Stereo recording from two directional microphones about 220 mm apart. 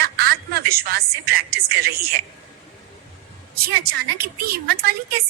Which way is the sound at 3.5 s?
45° right (ahead or behind).